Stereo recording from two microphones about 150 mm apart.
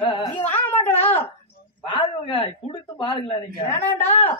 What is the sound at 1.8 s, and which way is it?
A woman's voice, 35° left (ahead or behind).